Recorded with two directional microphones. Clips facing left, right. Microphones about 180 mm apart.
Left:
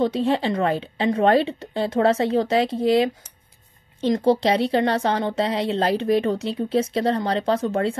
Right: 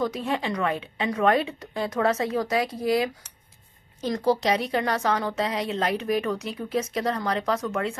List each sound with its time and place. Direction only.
0.0 s speech: 30° left (ahead or behind)